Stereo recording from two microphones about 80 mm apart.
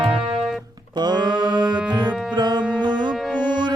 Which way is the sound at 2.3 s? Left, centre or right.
Right.